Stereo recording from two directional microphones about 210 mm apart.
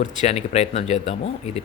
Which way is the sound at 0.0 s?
35° left (ahead or behind).